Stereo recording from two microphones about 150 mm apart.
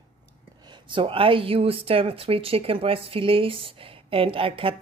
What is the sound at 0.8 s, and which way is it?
Speech, 35° right (ahead or behind).